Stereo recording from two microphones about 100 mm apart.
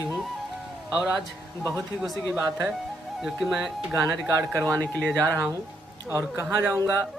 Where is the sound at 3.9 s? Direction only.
30° right (ahead or behind).